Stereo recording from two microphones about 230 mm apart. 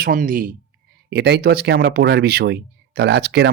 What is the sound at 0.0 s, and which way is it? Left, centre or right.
Speech, right.